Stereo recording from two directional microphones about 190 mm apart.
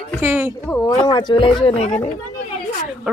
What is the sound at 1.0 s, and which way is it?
Speech, 25° left (ahead or behind).